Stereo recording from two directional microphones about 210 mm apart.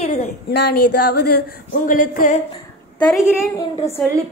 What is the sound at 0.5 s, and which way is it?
Speech, 50° left (ahead or behind).